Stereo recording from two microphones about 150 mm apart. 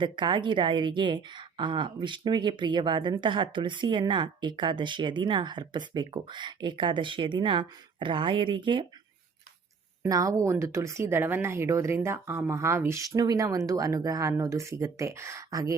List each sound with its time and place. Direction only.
0.0 s a woman's voice: 30° right (ahead or behind)
10.0 s speech: 20° right (ahead or behind)